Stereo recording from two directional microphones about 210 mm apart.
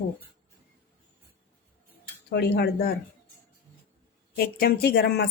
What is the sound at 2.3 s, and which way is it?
Speech, 50° left (ahead or behind).